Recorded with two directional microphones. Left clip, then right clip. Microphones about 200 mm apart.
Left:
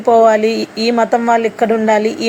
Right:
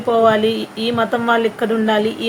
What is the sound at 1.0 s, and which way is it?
A woman's voice, 30° left (ahead or behind).